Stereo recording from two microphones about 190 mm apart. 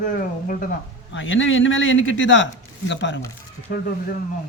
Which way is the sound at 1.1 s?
85° left.